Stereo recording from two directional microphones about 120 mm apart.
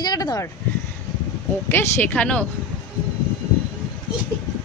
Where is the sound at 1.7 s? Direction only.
15° left (ahead or behind).